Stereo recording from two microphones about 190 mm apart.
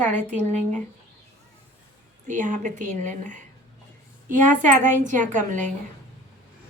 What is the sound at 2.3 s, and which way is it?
A woman's voice, 40° right (ahead or behind).